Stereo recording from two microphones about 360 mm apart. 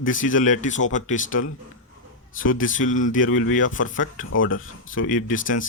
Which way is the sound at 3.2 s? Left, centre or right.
Left.